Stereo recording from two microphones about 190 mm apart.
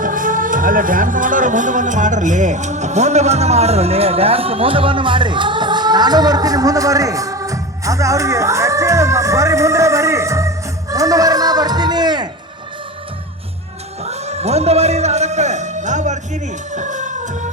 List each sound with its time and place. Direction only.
0.0 s speech: 45° right (ahead or behind); by 12.3 s 20° right (ahead or behind)
14.0 s a man's voice: 35° right (ahead or behind)